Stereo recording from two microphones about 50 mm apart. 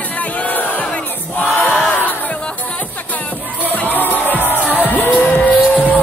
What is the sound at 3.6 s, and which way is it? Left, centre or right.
Music, left.